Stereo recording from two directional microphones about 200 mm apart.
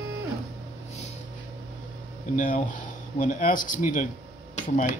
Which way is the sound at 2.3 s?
40° left (ahead or behind).